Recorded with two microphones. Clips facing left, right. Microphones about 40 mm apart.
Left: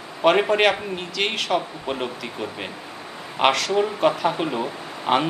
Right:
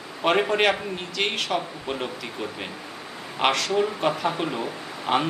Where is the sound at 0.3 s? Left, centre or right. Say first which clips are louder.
Left 3 dB; centre.